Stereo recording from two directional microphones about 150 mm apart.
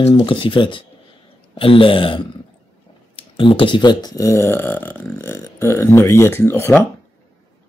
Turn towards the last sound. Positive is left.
turn(degrees=15)  # may be behind; listen again after turning